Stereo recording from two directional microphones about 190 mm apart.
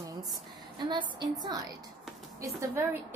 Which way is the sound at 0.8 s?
25° right (ahead or behind).